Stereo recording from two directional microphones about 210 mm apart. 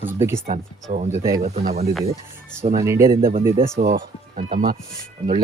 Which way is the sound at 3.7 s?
35° right (ahead or behind).